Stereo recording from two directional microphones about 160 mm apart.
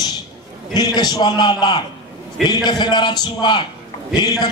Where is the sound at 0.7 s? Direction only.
25° left (ahead or behind).